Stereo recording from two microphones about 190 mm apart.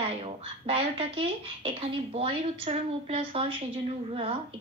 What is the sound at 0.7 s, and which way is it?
Speech, 30° right (ahead or behind).